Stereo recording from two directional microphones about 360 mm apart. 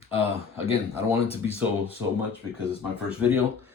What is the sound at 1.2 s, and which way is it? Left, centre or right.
Speech, centre.